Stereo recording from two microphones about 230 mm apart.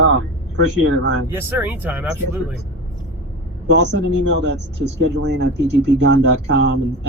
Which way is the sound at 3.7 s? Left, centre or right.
Right.